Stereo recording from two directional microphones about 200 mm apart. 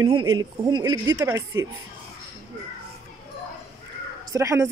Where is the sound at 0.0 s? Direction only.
20° right (ahead or behind).